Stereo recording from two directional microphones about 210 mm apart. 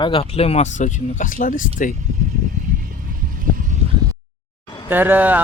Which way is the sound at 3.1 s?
40° right (ahead or behind).